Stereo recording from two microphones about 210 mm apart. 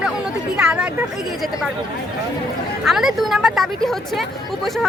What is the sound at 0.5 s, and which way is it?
Speech, 5° right (ahead or behind).